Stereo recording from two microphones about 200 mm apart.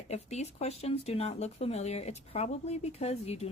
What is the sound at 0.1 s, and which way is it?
Speech, 35° left (ahead or behind).